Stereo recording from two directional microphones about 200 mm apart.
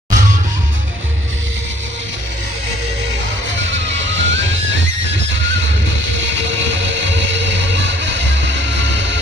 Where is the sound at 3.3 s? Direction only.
65° right (ahead or behind).